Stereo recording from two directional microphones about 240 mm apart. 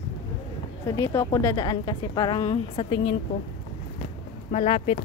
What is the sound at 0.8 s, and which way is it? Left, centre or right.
Speech, centre.